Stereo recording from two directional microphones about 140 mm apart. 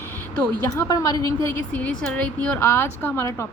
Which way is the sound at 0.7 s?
25° left (ahead or behind).